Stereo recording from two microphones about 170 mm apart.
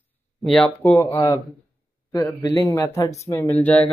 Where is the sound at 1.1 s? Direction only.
25° left (ahead or behind).